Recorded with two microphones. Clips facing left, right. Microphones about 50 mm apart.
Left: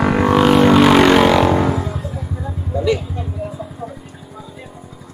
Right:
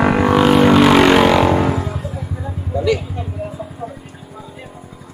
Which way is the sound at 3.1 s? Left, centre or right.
Centre.